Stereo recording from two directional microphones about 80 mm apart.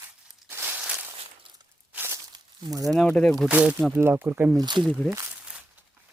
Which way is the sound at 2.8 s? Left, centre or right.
Centre.